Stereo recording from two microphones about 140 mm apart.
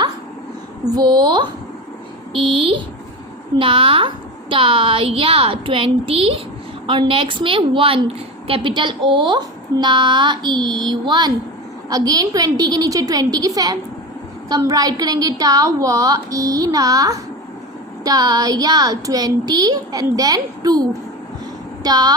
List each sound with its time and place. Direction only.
0.9 s a woman's voice: 30° right (ahead or behind)